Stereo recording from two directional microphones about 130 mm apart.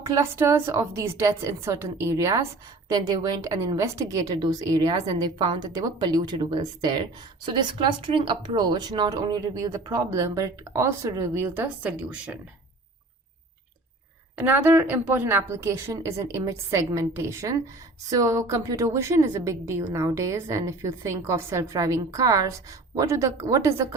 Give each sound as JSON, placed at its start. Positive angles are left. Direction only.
{"t": 0.1, "sound": "a woman's voice", "side_deg": -20}
{"t": 14.3, "sound": "a woman's voice", "side_deg": -15}